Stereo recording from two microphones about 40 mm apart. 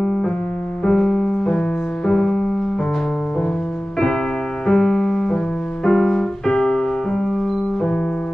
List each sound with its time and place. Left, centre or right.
0.0 s music: centre
4.6 s keyboard: centre
5.9 s music: centre